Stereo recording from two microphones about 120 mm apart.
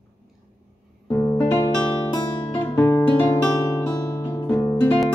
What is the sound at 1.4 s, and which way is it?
Music, 25° left (ahead or behind).